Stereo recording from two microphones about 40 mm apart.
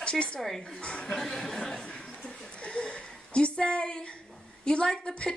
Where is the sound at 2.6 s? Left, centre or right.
Left.